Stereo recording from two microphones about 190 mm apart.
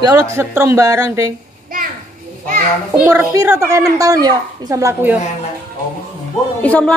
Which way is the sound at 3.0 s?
5° right (ahead or behind).